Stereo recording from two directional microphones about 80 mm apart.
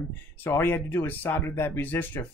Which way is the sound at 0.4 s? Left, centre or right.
Left.